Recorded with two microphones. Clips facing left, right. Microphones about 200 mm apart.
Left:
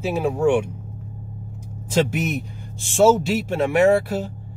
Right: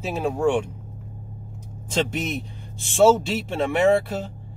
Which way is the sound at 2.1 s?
5° left (ahead or behind).